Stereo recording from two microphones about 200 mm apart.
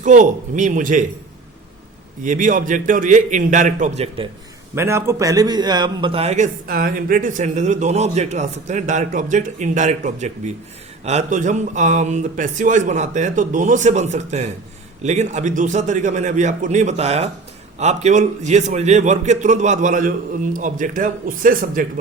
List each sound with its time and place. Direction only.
0.0 s a man's voice: 40° right (ahead or behind)
2.2 s a man's voice: 40° right (ahead or behind)
4.7 s a man's voice: 15° right (ahead or behind); by 21.8 s 45° right (ahead or behind)